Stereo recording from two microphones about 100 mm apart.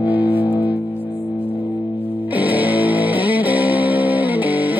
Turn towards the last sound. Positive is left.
turn(degrees=-15)  # may be behind; listen again after turning